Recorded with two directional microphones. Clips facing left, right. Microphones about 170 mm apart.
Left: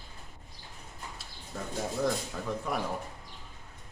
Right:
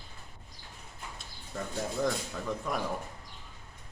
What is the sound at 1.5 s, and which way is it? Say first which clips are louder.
Speech: even; centre (ahead or behind).